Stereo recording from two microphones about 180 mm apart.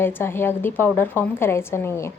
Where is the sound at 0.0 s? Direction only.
10° left (ahead or behind).